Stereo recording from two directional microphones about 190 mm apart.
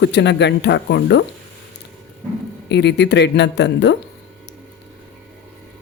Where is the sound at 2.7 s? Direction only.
65° left (ahead or behind).